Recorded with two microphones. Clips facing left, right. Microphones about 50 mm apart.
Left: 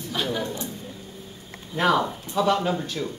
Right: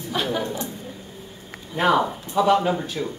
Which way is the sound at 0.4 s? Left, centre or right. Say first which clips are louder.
Right 2 dB; centre.